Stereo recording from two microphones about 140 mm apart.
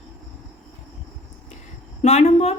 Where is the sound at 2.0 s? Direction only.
55° left (ahead or behind).